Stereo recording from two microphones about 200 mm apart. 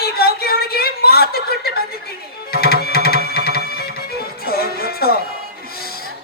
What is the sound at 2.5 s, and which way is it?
Music, 50° left (ahead or behind).